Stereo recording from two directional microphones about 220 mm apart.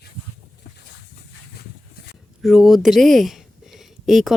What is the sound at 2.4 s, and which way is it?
Speech, centre (ahead or behind).